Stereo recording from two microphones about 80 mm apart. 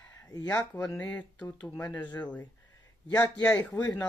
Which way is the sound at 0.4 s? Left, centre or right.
Centre.